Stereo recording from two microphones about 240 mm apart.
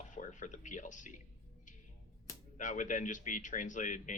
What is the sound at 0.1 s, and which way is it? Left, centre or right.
Speech, left.